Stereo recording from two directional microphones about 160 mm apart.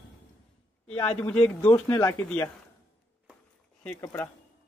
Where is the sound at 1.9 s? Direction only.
25° left (ahead or behind).